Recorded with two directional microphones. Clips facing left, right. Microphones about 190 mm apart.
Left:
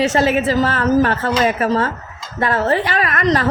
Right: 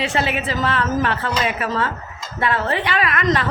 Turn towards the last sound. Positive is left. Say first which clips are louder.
# left 3 dB
turn(degrees=40)  # may be behind; listen again after turning